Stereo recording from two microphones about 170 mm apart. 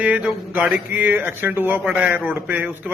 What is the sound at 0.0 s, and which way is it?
Speech, 10° right (ahead or behind).